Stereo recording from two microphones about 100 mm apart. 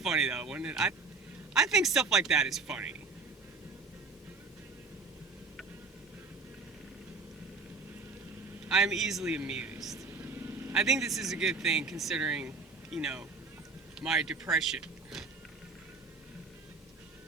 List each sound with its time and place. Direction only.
0.0 s a man's voice: 5° right (ahead or behind)
8.6 s a man's voice: 5° right (ahead or behind)
10.1 s vehicle: 25° right (ahead or behind)
10.8 s speech: 5° right (ahead or behind)